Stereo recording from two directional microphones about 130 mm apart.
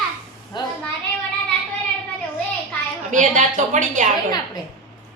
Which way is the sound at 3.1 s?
70° right (ahead or behind).